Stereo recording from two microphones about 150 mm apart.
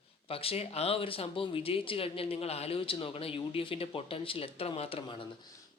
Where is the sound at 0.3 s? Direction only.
40° left (ahead or behind).